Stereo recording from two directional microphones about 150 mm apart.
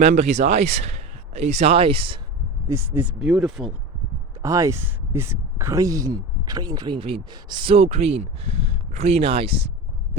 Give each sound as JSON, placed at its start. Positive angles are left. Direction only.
{"t": 0.0, "sound": "speech", "side_deg": -50}
{"t": 2.6, "sound": "speech", "side_deg": -15}
{"t": 3.1, "sound": "speech", "side_deg": 0}
{"t": 4.4, "sound": "speech", "side_deg": -20}